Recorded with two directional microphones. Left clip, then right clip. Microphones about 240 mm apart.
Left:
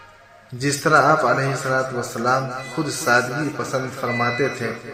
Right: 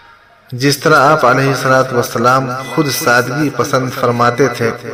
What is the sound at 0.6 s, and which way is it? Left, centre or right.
A man's voice, right.